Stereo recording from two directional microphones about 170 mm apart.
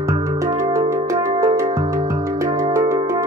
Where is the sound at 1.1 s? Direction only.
15° right (ahead or behind).